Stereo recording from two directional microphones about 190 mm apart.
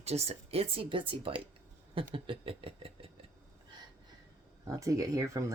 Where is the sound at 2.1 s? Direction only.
25° right (ahead or behind).